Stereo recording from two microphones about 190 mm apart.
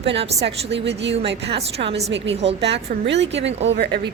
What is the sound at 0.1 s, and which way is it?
Speech, 30° right (ahead or behind).